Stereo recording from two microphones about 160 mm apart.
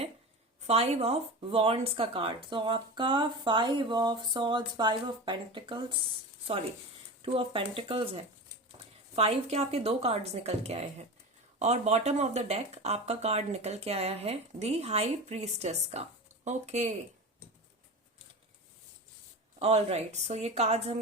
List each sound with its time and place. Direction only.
0.7 s speech: 40° right (ahead or behind)
7.2 s speech: 35° right (ahead or behind)
19.5 s speech: 40° right (ahead or behind)